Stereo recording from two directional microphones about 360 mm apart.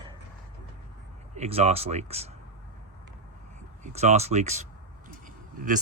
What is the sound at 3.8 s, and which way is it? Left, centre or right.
Speech, centre.